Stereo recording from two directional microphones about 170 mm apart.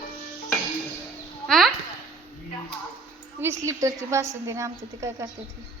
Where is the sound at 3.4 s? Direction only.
15° right (ahead or behind).